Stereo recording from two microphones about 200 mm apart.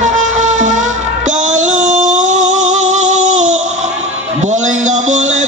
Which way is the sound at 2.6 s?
35° right (ahead or behind).